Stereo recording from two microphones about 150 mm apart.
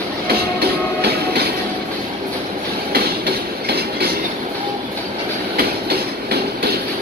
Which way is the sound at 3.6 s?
90° right.